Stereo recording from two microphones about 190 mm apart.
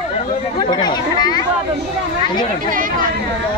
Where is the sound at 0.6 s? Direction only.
20° left (ahead or behind).